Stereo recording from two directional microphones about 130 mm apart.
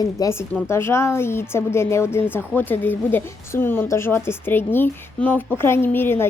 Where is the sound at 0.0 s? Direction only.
30° left (ahead or behind).